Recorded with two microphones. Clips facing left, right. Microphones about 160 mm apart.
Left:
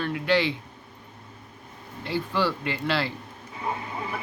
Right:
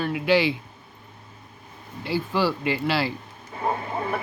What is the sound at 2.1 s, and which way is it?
Speech, 5° right (ahead or behind).